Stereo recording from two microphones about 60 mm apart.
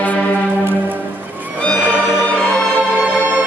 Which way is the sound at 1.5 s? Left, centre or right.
Left.